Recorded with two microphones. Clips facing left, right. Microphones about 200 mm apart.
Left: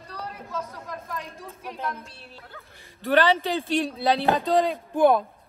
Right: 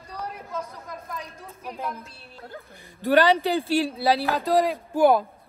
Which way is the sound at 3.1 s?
15° right (ahead or behind).